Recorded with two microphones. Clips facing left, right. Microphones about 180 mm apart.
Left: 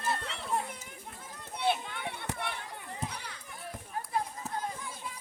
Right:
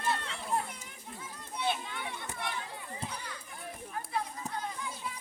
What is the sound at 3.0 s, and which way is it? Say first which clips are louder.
Children playing: right 1 dB; 70° left (ahead or behind).